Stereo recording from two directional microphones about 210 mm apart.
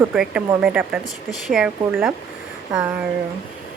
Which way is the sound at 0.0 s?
5° right (ahead or behind).